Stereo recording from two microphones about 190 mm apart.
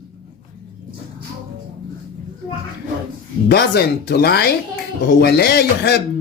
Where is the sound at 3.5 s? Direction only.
55° left (ahead or behind).